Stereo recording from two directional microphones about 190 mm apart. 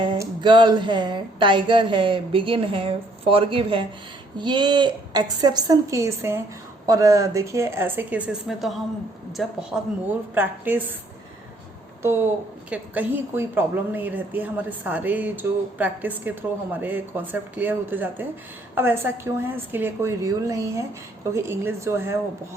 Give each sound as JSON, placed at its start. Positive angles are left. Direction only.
{"t": 0.0, "sound": "a woman's voice", "side_deg": -25}
{"t": 12.0, "sound": "a woman's voice", "side_deg": -10}